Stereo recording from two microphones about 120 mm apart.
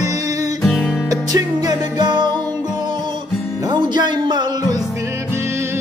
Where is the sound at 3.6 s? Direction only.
35° right (ahead or behind).